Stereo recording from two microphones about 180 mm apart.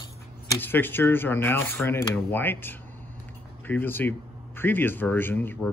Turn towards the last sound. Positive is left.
turn(degrees=10)  # may be behind; listen again after turning